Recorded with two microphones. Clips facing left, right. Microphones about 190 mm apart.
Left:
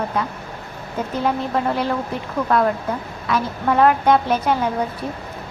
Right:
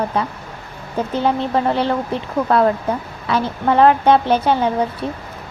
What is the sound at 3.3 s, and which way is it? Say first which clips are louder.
A woman's voice: right 3 dB; 30° right (ahead or behind).